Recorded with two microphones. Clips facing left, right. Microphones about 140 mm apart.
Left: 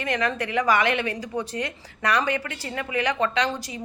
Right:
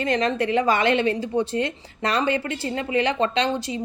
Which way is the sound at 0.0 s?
25° right (ahead or behind).